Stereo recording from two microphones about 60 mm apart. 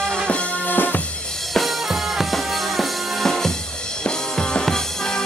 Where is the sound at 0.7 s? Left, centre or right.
Left.